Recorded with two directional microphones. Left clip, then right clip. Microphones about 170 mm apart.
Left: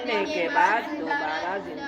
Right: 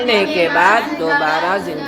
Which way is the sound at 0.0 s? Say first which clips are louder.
Right 11 dB; 15° right (ahead or behind).